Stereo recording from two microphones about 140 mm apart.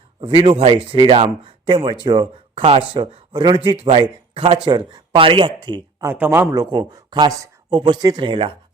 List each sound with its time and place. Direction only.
0.2 s speech: 35° right (ahead or behind)
6.0 s speech: 15° right (ahead or behind)
6.5 s speech: 30° right (ahead or behind)